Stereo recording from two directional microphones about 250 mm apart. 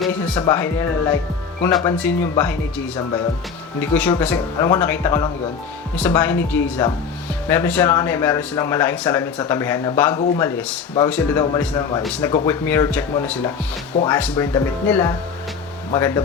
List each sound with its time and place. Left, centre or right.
0.0 s music: centre
0.5 s speech: centre
11.1 s speech: centre